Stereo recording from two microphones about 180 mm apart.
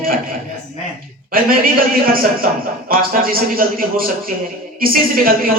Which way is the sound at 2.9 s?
50° right (ahead or behind).